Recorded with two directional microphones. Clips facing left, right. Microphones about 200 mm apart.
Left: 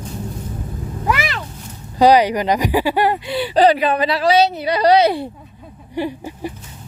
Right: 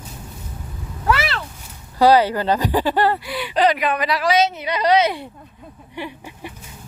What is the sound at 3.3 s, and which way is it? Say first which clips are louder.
A woman's voice: left 5 dB; 30° left (ahead or behind).